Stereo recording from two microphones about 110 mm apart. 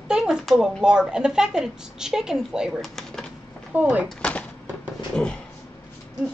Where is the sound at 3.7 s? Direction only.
15° right (ahead or behind).